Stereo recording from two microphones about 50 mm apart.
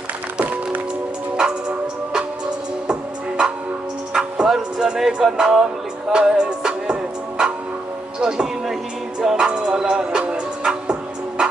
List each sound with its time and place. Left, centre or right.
1.3 s music: centre
8.2 s speech: centre
9.2 s music: centre